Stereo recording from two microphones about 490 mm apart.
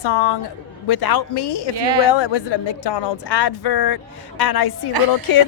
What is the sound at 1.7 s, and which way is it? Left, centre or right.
Speech, right.